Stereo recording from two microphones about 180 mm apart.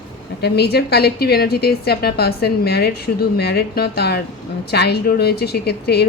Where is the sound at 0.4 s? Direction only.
65° left (ahead or behind).